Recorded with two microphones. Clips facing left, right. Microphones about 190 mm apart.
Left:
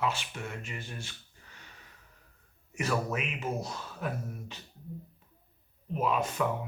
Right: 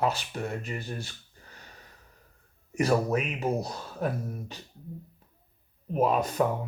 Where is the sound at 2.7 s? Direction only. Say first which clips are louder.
Right 7 dB; 35° right (ahead or behind).